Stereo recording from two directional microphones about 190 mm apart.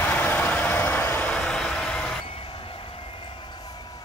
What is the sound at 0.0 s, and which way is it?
Vehicle, 10° left (ahead or behind).